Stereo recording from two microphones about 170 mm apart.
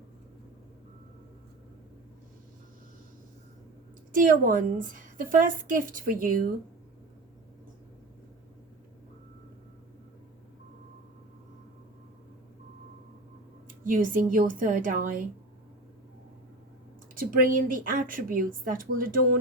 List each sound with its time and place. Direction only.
4.1 s speech: 55° right (ahead or behind)
13.8 s speech: 50° right (ahead or behind)
17.2 s a woman's voice: 55° right (ahead or behind)